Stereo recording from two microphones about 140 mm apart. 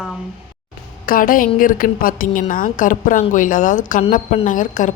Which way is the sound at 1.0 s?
80° left.